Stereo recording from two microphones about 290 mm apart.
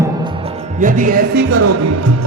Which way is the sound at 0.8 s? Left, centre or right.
Right.